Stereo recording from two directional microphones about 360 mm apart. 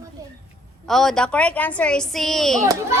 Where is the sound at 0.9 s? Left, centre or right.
Centre.